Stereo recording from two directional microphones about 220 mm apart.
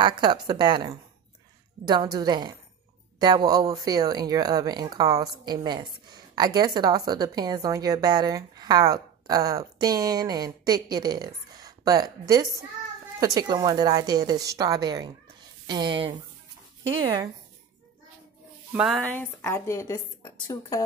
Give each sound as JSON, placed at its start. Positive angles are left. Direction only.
{"t": 0.0, "sound": "speech", "side_deg": -20}
{"t": 18.7, "sound": "music", "side_deg": -5}
{"t": 19.4, "sound": "a woman's voice", "side_deg": 10}